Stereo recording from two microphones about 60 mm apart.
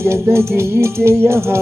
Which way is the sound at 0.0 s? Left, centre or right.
Right.